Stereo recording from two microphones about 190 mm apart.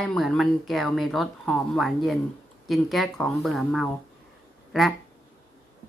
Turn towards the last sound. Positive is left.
turn(degrees=0)  # may be behind; listen again after turning